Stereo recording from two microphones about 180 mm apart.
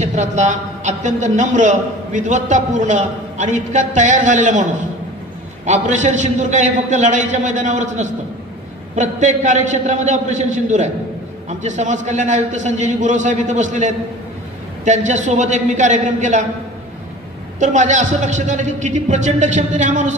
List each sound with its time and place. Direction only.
0.0 s a man's voice: 40° right (ahead or behind)
17.6 s a man's voice: 40° right (ahead or behind)